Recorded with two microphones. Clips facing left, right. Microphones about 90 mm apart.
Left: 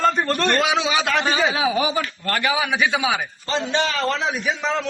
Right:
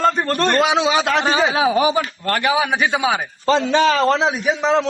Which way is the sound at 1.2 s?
25° right (ahead or behind).